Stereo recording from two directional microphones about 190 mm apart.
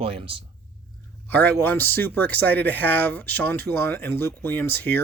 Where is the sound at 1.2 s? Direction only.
10° left (ahead or behind).